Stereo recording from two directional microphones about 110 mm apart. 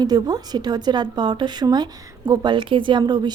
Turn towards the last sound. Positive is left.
turn(degrees=-40)  # may be behind; listen again after turning